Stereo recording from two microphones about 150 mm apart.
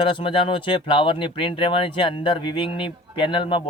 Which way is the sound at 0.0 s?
35° left (ahead or behind).